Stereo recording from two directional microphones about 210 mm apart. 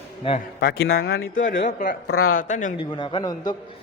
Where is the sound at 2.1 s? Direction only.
85° left.